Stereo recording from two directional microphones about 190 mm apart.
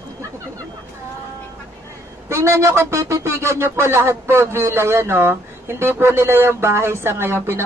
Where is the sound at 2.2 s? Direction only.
15° right (ahead or behind).